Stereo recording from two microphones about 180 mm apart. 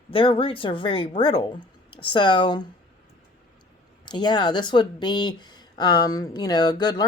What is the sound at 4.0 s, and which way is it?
Speech, 25° left (ahead or behind).